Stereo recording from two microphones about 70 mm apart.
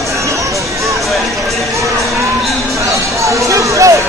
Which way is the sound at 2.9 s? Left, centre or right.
Right.